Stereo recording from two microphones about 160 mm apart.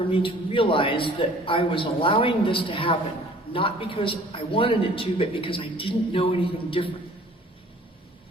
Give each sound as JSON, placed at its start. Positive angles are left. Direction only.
{"t": 0.1, "sound": "a man's voice", "side_deg": 35}